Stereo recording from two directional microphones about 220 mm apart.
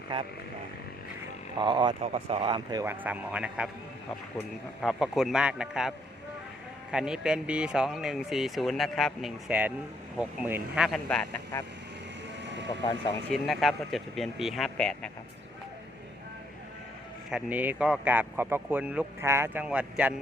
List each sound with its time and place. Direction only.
1.5 s speech: 20° right (ahead or behind); by 5.9 s 5° right (ahead or behind)
6.9 s speech: 5° right (ahead or behind)
12.4 s vehicle: 55° right (ahead or behind)
13.3 s speech: centre (ahead or behind)
17.3 s speech: 5° right (ahead or behind)